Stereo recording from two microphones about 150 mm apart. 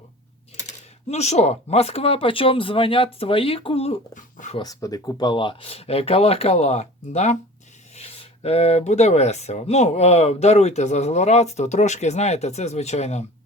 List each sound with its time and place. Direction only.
1.0 s speech: 45° left (ahead or behind)
4.1 s speech: 55° left (ahead or behind)
4.5 s speech: 25° left (ahead or behind); by 13.2 s 45° left (ahead or behind)